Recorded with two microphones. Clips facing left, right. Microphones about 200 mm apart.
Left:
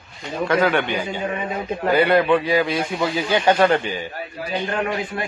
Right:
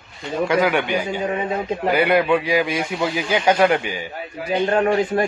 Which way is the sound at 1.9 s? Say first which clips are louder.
Left 1 dB; 10° right (ahead or behind).